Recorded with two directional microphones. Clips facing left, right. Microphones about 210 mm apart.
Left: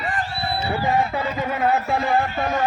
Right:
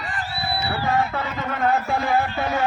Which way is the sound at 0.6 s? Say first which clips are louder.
Left 2 dB; 15° left (ahead or behind).